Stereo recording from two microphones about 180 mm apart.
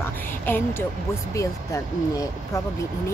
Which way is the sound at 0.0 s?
10° left (ahead or behind).